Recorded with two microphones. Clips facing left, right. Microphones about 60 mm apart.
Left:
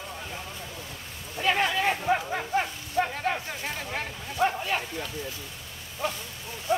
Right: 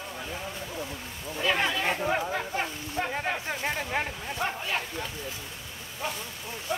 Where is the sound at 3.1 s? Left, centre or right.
Right.